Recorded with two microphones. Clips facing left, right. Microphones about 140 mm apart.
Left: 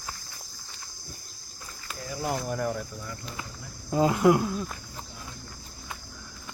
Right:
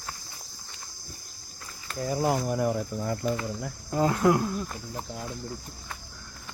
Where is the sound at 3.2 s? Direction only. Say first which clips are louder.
Right 14 dB; 60° right (ahead or behind).